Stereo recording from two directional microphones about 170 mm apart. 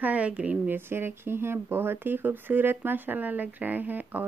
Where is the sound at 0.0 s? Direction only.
10° right (ahead or behind).